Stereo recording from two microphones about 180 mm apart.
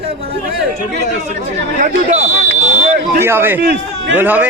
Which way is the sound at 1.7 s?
45° right (ahead or behind).